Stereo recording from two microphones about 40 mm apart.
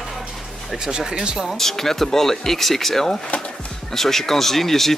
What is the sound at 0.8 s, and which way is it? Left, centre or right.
Speech, centre.